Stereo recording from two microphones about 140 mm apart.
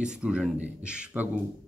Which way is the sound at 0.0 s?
5° right (ahead or behind).